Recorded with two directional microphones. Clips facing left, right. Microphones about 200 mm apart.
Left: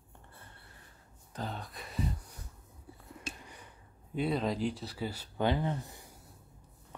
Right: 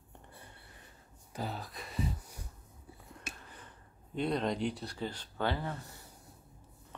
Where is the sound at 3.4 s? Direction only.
15° left (ahead or behind).